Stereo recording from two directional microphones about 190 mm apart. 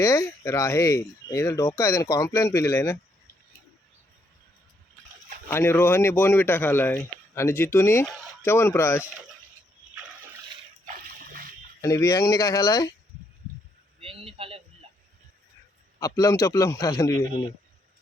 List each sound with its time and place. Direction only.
0.0 s speech: 15° left (ahead or behind)
5.5 s speech: 10° left (ahead or behind)
10.8 s splash: 50° right (ahead or behind)
11.8 s speech: 15° left (ahead or behind)
14.0 s speech: 30° right (ahead or behind)
16.0 s speech: 20° left (ahead or behind)